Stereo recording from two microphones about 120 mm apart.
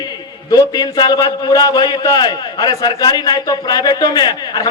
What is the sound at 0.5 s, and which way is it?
A man's voice, 30° left (ahead or behind).